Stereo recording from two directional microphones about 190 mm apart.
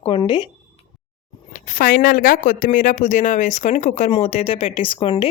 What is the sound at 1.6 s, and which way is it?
Speech, 45° left (ahead or behind).